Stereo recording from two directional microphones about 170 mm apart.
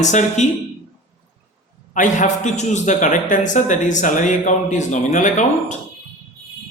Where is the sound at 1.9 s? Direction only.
50° left (ahead or behind).